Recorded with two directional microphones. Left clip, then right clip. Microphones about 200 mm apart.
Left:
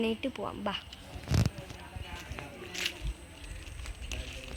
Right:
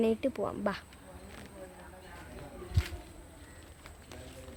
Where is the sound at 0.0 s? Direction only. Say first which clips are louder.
Right 3 dB; 30° right (ahead or behind).